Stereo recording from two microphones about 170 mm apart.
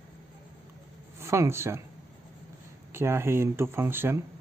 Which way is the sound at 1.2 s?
15° right (ahead or behind).